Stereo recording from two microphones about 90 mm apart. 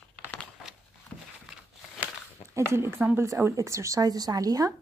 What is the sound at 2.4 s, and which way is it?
Speech, 30° right (ahead or behind).